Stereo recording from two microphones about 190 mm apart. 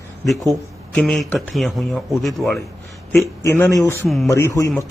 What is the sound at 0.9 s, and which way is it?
Speech, 5° left (ahead or behind).